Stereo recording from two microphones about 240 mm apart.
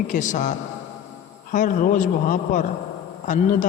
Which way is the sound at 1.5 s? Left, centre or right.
Left.